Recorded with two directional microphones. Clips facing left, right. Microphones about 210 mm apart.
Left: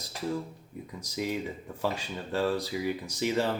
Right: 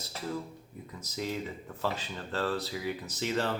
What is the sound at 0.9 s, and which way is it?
Speech, 15° left (ahead or behind).